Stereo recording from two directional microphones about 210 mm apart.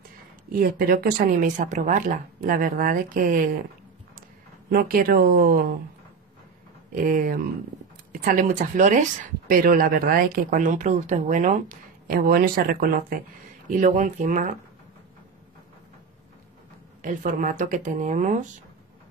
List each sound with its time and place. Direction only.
0.5 s speech: 45° right (ahead or behind)
4.6 s speech: 45° right (ahead or behind)
6.9 s speech: 40° right (ahead or behind)
17.0 s speech: 40° right (ahead or behind)